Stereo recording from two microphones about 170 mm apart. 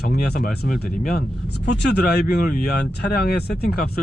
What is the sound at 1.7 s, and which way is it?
Speech, 75° left (ahead or behind).